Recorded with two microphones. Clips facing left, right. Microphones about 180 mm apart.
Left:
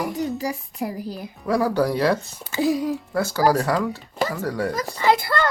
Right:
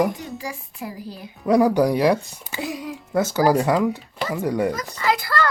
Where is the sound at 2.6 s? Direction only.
40° left (ahead or behind).